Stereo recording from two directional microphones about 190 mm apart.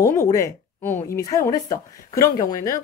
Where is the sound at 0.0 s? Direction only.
15° left (ahead or behind).